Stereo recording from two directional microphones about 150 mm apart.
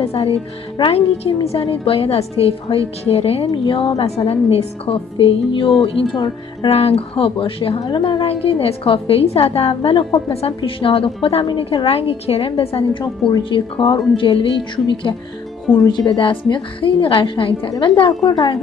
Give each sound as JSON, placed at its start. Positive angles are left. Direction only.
{"t": 0.0, "sound": "a woman's voice", "side_deg": 45}
{"t": 6.7, "sound": "a woman's voice", "side_deg": 45}